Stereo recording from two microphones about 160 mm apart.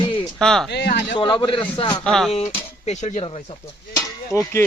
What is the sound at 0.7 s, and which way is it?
Speech, 90° left.